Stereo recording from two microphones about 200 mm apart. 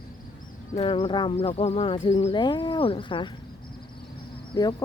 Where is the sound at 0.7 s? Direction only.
30° left (ahead or behind).